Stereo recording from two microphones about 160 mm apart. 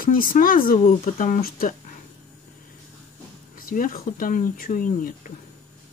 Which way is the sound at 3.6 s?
60° left (ahead or behind).